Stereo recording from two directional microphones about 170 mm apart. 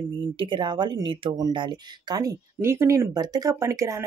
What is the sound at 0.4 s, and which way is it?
Speech, 30° right (ahead or behind).